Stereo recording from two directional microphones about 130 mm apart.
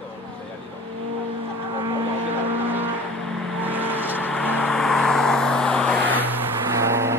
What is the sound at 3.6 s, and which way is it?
Vehicle, 15° right (ahead or behind).